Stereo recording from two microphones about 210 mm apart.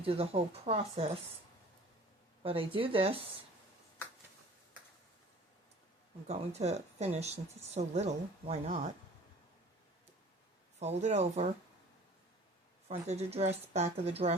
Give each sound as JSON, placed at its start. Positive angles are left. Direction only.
{"t": 0.0, "sound": "speech", "side_deg": -25}
{"t": 2.4, "sound": "speech", "side_deg": -25}
{"t": 6.2, "sound": "speech", "side_deg": -30}
{"t": 10.8, "sound": "speech", "side_deg": -30}
{"t": 12.9, "sound": "speech", "side_deg": -30}